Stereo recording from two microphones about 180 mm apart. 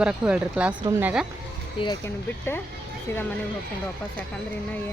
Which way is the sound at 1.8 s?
25° left (ahead or behind).